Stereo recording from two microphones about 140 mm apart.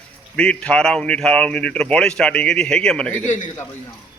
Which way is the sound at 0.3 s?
5° left (ahead or behind).